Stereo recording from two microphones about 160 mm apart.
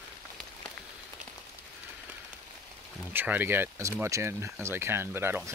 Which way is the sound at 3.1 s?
10° right (ahead or behind).